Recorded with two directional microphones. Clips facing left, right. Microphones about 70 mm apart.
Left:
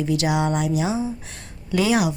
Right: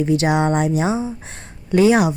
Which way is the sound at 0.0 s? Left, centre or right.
Right.